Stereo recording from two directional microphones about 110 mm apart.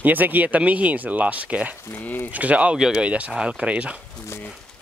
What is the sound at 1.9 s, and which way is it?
Speech, 15° left (ahead or behind).